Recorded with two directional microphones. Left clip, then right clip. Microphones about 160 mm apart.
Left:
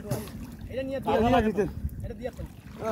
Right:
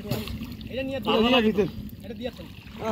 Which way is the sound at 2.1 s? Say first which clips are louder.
Right 2 dB; 40° right (ahead or behind).